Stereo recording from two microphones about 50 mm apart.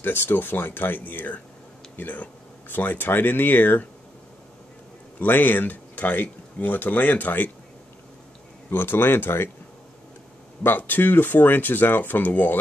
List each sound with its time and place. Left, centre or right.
0.0 s speech: left
5.2 s speech: left
8.6 s speech: left
10.6 s speech: left